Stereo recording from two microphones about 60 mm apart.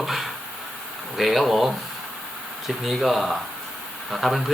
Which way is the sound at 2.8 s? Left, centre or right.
Centre.